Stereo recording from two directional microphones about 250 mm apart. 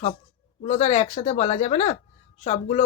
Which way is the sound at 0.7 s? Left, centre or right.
Left.